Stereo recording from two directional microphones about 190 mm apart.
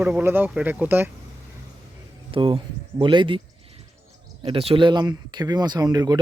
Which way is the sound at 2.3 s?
25° right (ahead or behind).